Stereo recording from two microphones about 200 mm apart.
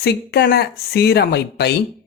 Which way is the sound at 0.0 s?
55° left (ahead or behind).